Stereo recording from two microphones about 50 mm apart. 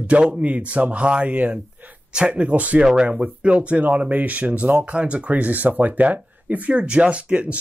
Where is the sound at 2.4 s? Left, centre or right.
Right.